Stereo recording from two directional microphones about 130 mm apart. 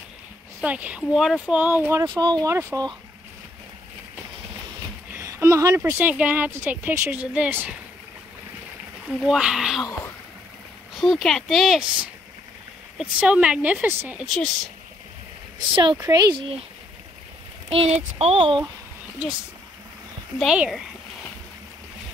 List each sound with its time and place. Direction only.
0.6 s speech: 10° right (ahead or behind)
2.0 s speech: 35° right (ahead or behind)
5.1 s a sound: 20° right (ahead or behind)
5.8 s speech: 15° right (ahead or behind)
9.0 s speech: 5° right (ahead or behind)
11.0 s speech: centre (ahead or behind)
14.2 s speech: centre (ahead or behind)
15.7 s speech: 35° right (ahead or behind)
17.6 s speech: 50° right (ahead or behind)
20.3 s speech: 5° right (ahead or behind)